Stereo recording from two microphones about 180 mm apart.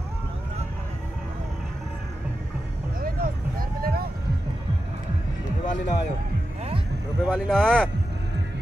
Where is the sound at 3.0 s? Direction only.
55° right (ahead or behind).